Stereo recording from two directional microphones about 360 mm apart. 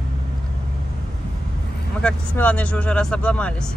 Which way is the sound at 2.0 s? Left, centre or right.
Centre.